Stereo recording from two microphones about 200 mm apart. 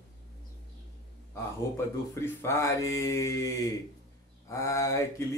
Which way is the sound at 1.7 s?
15° left (ahead or behind).